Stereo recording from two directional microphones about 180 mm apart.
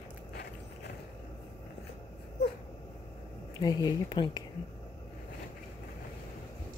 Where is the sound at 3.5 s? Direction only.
25° left (ahead or behind).